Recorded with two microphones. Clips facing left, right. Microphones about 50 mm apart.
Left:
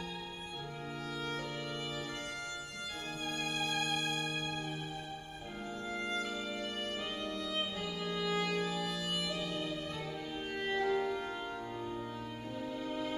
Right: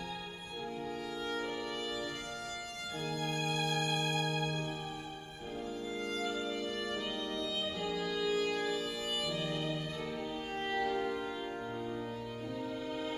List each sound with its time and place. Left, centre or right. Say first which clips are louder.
3.3 s music: even; left
4.0 s music: right 3 dB; right
5.9 s music: left 2 dB; left
8.0 s music: right 1 dB; left
10.7 s music: left 2 dB; left